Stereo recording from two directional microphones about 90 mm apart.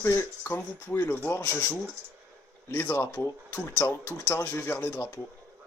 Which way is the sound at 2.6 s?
25° left (ahead or behind).